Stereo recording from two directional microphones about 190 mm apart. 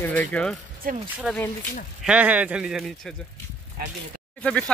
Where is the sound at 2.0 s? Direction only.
5° right (ahead or behind).